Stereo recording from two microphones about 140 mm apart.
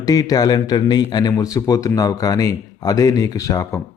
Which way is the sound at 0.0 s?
25° left (ahead or behind).